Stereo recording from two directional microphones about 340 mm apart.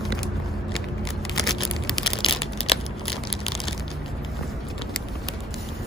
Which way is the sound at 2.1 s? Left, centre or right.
Centre.